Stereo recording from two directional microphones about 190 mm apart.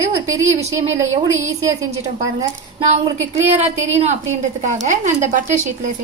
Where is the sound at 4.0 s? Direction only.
35° right (ahead or behind).